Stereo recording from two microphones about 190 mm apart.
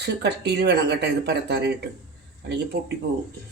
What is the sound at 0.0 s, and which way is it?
Speech, 60° right (ahead or behind).